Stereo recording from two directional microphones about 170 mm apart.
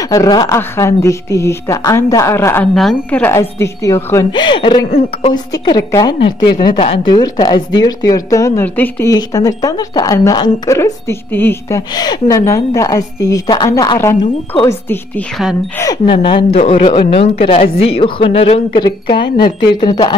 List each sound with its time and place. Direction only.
0.0 s a woman's voice: 20° left (ahead or behind)
2.7 s a woman's voice: centre (ahead or behind)
15.8 s speech: 25° left (ahead or behind)